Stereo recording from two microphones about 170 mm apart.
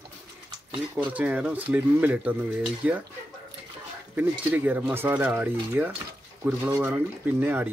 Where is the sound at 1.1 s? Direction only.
10° right (ahead or behind).